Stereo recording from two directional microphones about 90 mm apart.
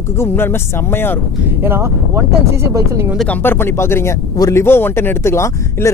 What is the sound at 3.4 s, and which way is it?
Speech, 25° left (ahead or behind).